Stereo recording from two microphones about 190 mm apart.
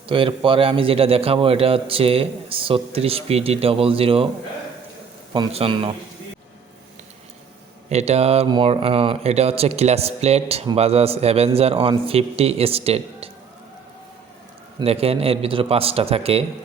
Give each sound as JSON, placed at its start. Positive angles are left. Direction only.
{"t": 0.1, "sound": "a man's voice", "side_deg": -25}
{"t": 5.3, "sound": "a man's voice", "side_deg": -30}
{"t": 7.9, "sound": "speech", "side_deg": -35}
{"t": 14.8, "sound": "speech", "side_deg": -30}